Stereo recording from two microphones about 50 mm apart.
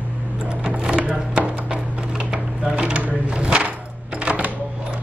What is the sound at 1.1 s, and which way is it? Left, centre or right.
Chopping, centre.